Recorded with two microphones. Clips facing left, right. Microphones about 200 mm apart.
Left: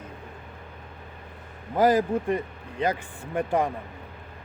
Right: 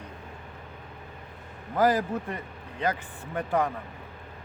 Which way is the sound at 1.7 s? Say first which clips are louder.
Left 3 dB; 10° left (ahead or behind).